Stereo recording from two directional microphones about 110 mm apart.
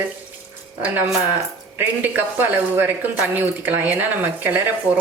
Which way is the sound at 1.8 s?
15° right (ahead or behind).